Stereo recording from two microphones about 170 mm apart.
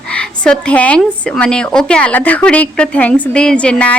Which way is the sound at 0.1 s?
5° left (ahead or behind).